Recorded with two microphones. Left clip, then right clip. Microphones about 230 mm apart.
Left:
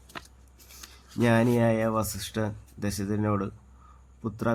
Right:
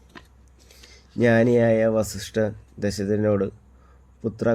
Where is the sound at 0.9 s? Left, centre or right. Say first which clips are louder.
Right 5 dB; centre.